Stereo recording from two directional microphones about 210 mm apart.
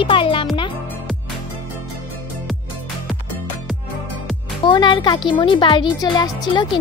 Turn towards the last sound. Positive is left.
turn(degrees=20)  # may be behind; listen again after turning